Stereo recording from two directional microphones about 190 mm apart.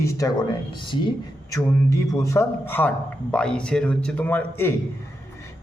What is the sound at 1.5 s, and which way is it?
Speech, 15° left (ahead or behind).